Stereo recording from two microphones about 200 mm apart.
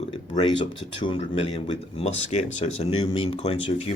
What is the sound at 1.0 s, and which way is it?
Speech, 30° left (ahead or behind).